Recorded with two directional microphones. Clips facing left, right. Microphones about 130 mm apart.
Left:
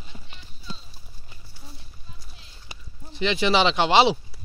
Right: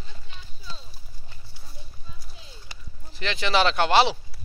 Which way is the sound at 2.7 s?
20° left (ahead or behind).